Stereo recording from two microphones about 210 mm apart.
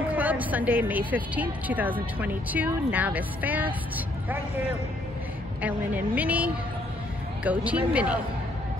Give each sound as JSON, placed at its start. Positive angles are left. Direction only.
{"t": 0.1, "sound": "a woman's voice", "side_deg": -10}
{"t": 5.6, "sound": "a woman's voice", "side_deg": -5}